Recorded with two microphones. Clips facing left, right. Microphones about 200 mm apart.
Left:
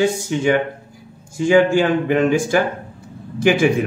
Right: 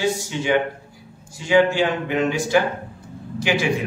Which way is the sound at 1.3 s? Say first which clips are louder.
Left 4 dB; 45° left (ahead or behind).